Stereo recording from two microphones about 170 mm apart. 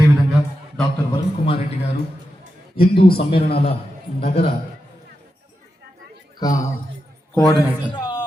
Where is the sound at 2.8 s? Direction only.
65° left (ahead or behind).